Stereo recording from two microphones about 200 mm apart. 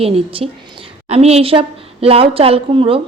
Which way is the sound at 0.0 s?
30° right (ahead or behind).